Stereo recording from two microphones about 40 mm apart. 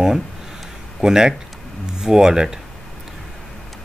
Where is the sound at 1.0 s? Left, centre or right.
Centre.